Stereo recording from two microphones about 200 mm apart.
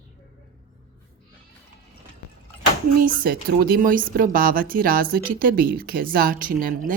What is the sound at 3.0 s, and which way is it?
Speech, 45° right (ahead or behind).